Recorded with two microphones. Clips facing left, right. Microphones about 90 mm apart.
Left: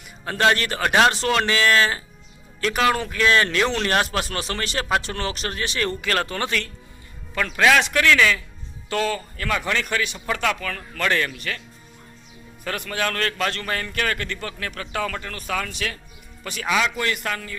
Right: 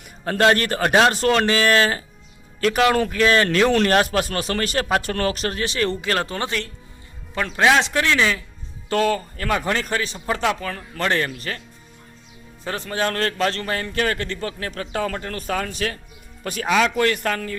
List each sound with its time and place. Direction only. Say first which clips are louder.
0.5 s a man's voice: right 2 dB; 40° right (ahead or behind)
8.9 s a man's voice: right 4 dB; 40° right (ahead or behind)
12.6 s a man's voice: right 2 dB; 30° right (ahead or behind)